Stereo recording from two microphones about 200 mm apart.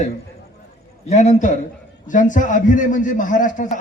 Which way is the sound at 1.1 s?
35° left (ahead or behind).